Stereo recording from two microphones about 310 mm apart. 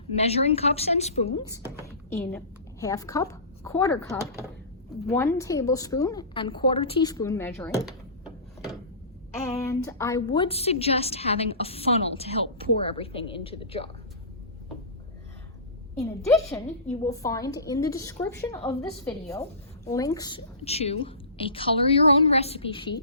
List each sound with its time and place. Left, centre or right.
0.1 s a woman's voice: centre
2.0 s a woman's voice: centre
9.3 s a woman's voice: centre
16.0 s a woman's voice: centre